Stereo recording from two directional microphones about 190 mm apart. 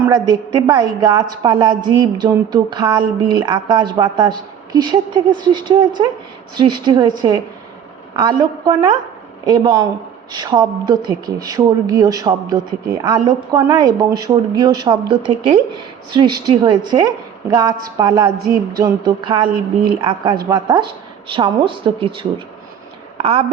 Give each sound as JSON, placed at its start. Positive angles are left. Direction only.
{"t": 0.0, "sound": "speech", "side_deg": -20}